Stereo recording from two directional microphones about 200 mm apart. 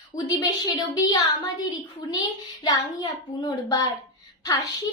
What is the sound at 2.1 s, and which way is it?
A child's voice, 20° left (ahead or behind).